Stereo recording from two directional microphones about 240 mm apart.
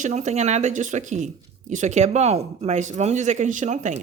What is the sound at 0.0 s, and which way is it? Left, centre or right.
Speech, right.